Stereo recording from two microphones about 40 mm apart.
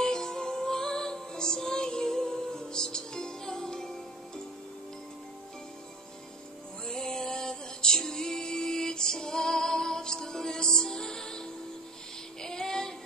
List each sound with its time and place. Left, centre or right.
0.0 s music: centre
6.9 s music: centre
12.4 s child singing: centre